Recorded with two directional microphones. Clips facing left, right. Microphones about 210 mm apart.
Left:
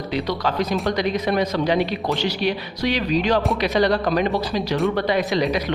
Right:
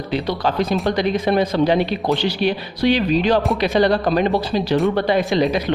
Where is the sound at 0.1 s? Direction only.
30° right (ahead or behind).